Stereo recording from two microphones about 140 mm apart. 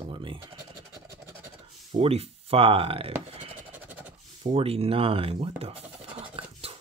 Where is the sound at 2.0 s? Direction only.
45° right (ahead or behind).